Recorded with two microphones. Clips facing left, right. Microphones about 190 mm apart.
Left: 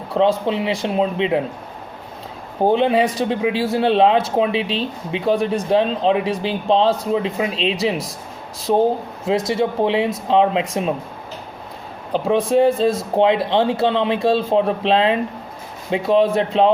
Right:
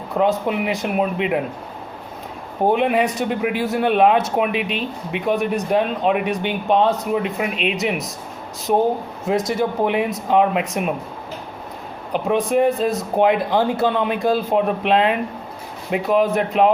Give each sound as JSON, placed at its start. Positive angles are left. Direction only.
{"t": 0.1, "sound": "speech", "side_deg": 25}
{"t": 2.6, "sound": "speech", "side_deg": 30}
{"t": 9.2, "sound": "speech", "side_deg": 25}
{"t": 12.1, "sound": "speech", "side_deg": 30}